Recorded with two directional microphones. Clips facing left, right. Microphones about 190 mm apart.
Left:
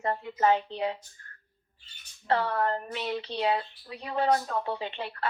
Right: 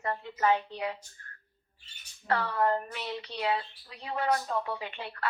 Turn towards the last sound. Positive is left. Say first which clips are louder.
# left 3 dB
turn(degrees=30)  # may be behind; listen again after turning